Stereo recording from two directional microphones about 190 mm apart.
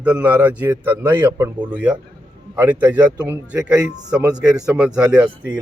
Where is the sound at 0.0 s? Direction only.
10° right (ahead or behind).